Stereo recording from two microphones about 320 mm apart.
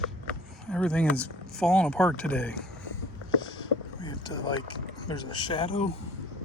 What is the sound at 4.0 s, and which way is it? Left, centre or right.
Speech, centre.